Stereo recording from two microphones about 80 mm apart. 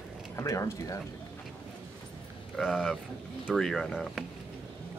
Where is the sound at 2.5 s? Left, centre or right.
Centre.